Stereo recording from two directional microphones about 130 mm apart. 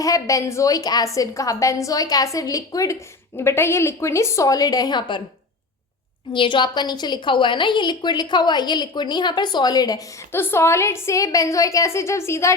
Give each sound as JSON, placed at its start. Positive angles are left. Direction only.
{"t": 0.0, "sound": "a woman's voice", "side_deg": 25}
{"t": 6.3, "sound": "a woman's voice", "side_deg": 40}